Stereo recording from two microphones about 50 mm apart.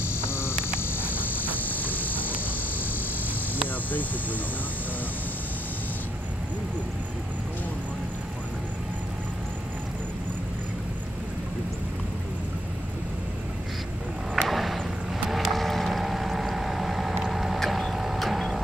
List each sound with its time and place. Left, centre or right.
0.3 s frog: left
1.5 s vehicle: left
14.3 s a sound: centre
15.2 s boat: centre
17.2 s vehicle: centre